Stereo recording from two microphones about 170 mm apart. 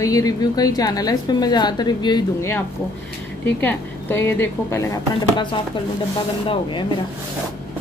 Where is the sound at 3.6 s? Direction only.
10° left (ahead or behind).